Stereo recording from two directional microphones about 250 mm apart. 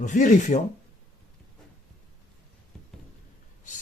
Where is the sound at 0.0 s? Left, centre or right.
Left.